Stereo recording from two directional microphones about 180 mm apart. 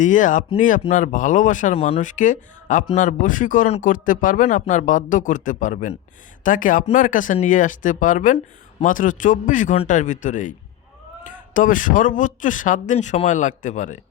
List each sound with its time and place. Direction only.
0.0 s speech: 45° left (ahead or behind)
11.5 s speech: 45° left (ahead or behind)